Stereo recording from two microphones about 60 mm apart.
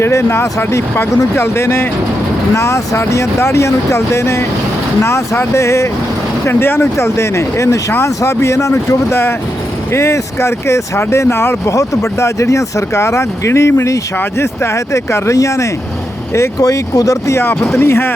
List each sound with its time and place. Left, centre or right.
0.0 s speech: left
6.4 s speech: left
11.7 s speech: left
16.6 s speech: left
17.3 s speech: left